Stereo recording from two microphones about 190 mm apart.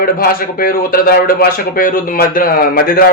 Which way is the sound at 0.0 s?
50° left (ahead or behind).